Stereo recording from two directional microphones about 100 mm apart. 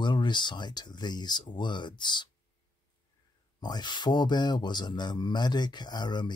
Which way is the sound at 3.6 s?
45° left (ahead or behind).